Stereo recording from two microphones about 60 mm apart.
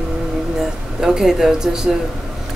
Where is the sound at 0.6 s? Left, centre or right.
Centre.